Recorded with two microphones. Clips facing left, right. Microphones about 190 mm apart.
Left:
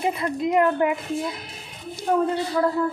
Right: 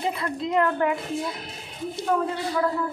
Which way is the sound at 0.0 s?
20° left (ahead or behind).